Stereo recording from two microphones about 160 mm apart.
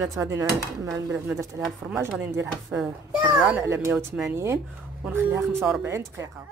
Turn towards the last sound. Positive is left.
turn(degrees=-15)  # may be behind; listen again after turning